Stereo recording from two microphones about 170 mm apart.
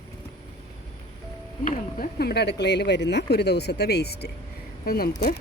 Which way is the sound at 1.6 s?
50° left (ahead or behind).